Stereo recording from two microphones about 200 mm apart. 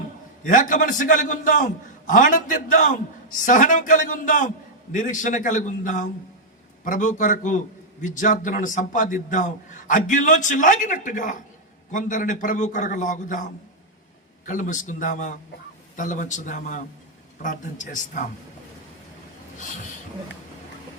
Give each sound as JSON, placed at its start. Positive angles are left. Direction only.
{"t": 0.4, "sound": "a man's voice", "side_deg": 40}